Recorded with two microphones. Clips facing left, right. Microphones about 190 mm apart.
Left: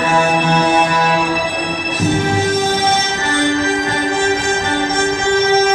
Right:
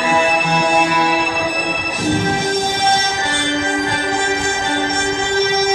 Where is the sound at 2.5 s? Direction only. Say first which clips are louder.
Left 2 dB; 10° right (ahead or behind).